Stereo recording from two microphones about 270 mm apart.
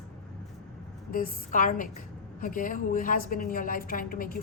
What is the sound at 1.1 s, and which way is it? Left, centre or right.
A woman's voice, left.